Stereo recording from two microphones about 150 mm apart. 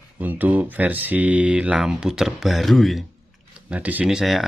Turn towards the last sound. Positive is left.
turn(degrees=0)  # may be behind; listen again after turning